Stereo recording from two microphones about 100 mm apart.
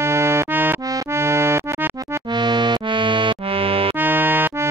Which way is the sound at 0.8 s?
30° right (ahead or behind).